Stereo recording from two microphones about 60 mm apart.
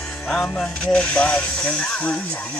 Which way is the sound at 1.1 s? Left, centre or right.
Centre.